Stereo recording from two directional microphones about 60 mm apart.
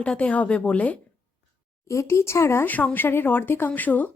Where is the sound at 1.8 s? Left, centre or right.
Left.